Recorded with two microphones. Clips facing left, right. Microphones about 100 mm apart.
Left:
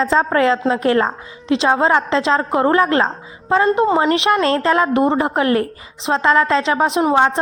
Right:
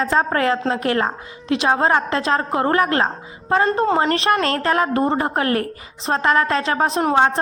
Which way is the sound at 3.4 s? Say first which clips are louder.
Left 3 dB; 15° left (ahead or behind).